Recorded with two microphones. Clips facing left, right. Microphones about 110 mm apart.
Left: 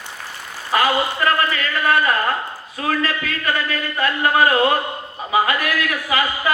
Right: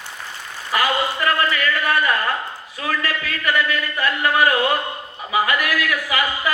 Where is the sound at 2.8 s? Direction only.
30° left (ahead or behind).